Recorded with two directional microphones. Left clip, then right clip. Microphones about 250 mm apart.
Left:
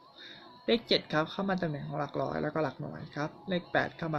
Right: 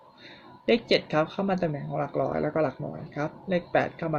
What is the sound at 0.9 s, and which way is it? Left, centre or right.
Speech, centre.